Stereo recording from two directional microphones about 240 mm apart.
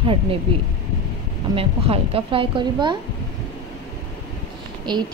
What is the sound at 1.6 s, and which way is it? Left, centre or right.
A woman's voice, right.